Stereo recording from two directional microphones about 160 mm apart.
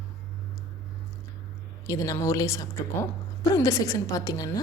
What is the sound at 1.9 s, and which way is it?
A woman's voice, 20° left (ahead or behind).